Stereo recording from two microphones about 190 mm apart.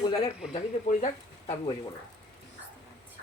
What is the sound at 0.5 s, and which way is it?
Speech, 40° left (ahead or behind).